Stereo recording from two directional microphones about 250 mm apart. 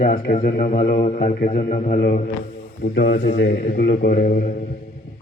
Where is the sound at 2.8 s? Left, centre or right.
Left.